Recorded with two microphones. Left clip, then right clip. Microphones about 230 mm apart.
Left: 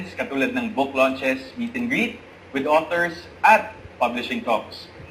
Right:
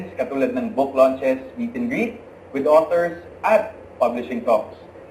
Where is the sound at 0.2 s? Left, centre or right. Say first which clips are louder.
Right 2 dB; left.